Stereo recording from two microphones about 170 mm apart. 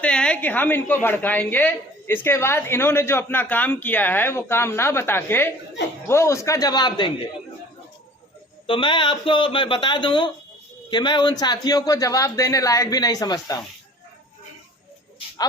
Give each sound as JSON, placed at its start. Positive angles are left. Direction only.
{"t": 0.0, "sound": "a woman's voice", "side_deg": 5}
{"t": 8.6, "sound": "speech", "side_deg": 30}